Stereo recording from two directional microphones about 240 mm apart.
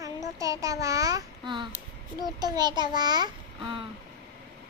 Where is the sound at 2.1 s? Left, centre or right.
Centre.